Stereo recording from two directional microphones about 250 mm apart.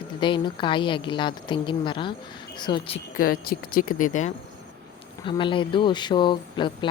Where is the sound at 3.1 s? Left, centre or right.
Left.